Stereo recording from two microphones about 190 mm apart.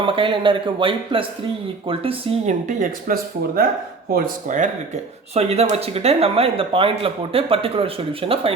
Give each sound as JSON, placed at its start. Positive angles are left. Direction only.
{"t": 0.0, "sound": "a man's voice", "side_deg": -25}